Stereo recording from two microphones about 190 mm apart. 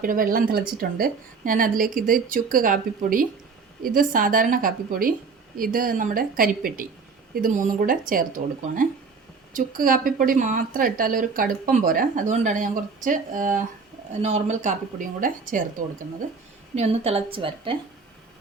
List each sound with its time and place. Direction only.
0.0 s speech: 45° right (ahead or behind)
9.5 s a woman's voice: 45° right (ahead or behind)
16.7 s a woman's voice: 35° right (ahead or behind)